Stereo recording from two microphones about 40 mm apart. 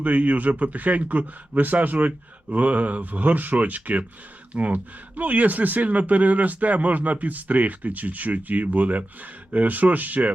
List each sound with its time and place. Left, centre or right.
0.0 s speech: right